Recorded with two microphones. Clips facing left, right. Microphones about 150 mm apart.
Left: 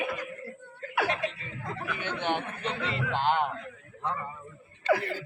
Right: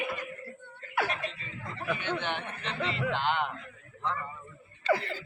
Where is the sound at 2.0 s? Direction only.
50° left (ahead or behind).